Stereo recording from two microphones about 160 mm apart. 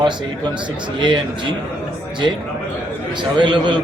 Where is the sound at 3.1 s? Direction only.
30° right (ahead or behind).